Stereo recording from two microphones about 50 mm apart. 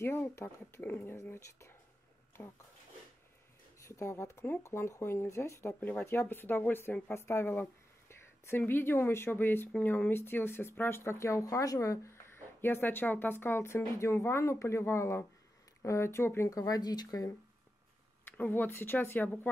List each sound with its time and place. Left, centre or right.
0.0 s speech: left
0.8 s speech: left
1.3 s speech: left
3.8 s speech: left
5.9 s speech: left
7.2 s speech: left
8.1 s speech: left
11.1 s speech: left
12.3 s speech: left
18.2 s speech: left